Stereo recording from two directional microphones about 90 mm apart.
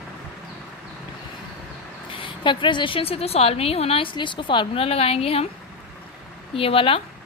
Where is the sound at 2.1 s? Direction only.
65° left (ahead or behind); by 5.4 s 90° left.